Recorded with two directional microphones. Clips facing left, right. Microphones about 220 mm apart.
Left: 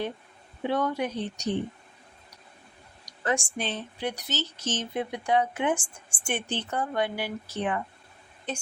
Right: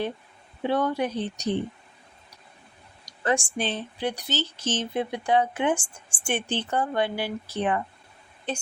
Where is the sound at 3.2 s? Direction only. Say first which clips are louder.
Right 3 dB; 30° right (ahead or behind).